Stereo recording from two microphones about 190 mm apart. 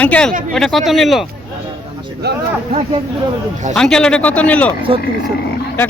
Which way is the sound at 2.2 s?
60° right (ahead or behind).